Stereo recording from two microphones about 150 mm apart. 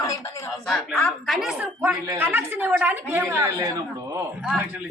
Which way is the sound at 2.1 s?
15° right (ahead or behind).